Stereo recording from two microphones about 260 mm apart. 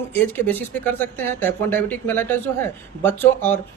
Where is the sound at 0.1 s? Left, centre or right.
Centre.